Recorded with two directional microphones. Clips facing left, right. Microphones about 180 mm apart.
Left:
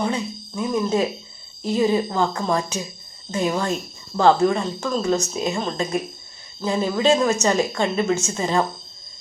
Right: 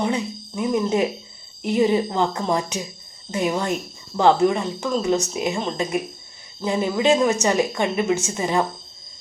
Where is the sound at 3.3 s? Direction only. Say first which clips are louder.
Even; 15° right (ahead or behind).